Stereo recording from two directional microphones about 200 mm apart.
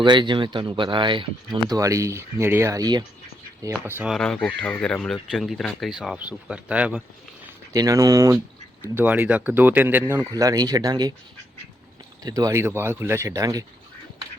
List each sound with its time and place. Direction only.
0.0 s speech: 25° right (ahead or behind)
3.8 s speech: 5° right (ahead or behind)
7.7 s speech: 15° right (ahead or behind)
12.2 s speech: 15° right (ahead or behind)